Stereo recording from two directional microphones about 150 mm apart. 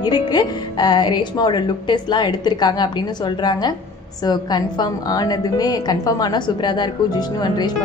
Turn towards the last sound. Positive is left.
turn(degrees=30)  # may be behind; listen again after turning